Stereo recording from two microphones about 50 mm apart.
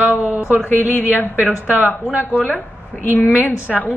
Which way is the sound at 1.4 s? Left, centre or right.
Right.